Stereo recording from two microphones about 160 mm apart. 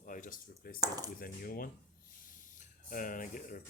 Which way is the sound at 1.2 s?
65° left (ahead or behind).